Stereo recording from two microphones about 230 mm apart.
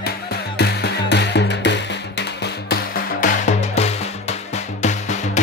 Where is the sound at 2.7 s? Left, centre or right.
Left.